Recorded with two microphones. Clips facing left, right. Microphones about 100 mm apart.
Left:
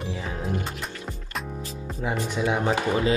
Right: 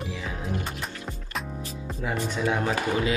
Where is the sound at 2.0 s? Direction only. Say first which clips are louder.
Left 1 dB; 15° left (ahead or behind).